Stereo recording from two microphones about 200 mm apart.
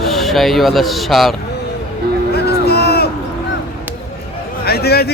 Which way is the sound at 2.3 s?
55° left (ahead or behind).